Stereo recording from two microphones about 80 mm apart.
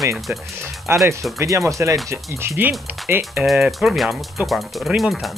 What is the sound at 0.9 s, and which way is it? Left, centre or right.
Speech, right.